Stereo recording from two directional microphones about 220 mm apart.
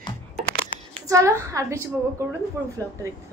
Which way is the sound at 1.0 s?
15° right (ahead or behind).